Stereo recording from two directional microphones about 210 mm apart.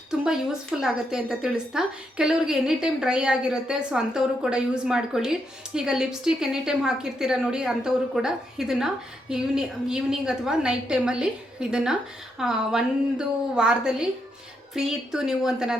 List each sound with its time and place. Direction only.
0.8 s a woman's voice: centre (ahead or behind)